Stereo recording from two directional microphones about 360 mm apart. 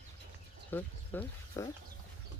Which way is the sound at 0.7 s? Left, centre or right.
Centre.